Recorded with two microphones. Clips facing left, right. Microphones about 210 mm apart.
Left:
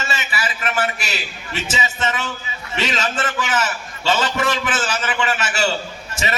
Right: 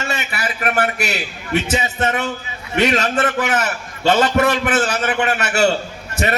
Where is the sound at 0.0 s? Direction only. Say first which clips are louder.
Right 2 dB; 60° right (ahead or behind).